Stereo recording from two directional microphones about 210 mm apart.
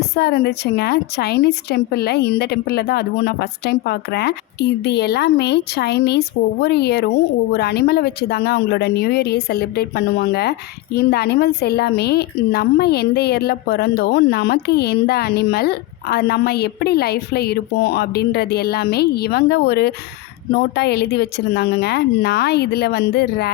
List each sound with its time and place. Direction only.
0.2 s a woman's voice: 50° left (ahead or behind)